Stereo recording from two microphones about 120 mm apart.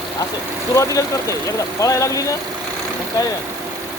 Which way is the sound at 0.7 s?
30° left (ahead or behind).